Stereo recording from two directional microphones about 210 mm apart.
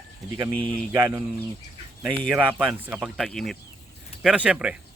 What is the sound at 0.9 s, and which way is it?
Speech, 20° right (ahead or behind).